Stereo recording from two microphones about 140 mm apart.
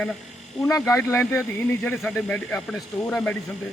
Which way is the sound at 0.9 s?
20° left (ahead or behind).